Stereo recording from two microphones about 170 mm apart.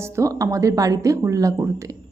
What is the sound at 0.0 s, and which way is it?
A woman's voice, 20° right (ahead or behind).